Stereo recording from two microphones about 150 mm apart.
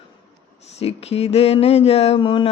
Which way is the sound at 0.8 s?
40° left (ahead or behind).